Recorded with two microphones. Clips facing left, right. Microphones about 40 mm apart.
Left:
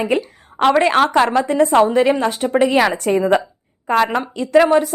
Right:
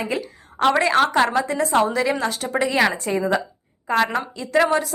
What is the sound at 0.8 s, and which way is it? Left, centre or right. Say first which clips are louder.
Speech: left 3 dB; left.